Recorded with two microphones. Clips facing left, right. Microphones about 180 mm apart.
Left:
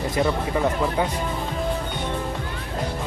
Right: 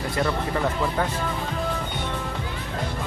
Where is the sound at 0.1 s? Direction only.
15° left (ahead or behind).